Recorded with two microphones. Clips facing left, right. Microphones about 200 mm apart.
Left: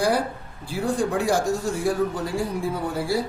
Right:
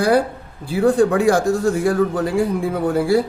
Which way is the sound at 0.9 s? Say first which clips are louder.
Right 4 dB; 60° right (ahead or behind).